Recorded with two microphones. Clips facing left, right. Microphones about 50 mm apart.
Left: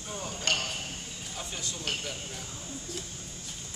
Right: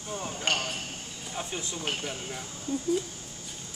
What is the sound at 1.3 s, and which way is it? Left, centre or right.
Speech, right.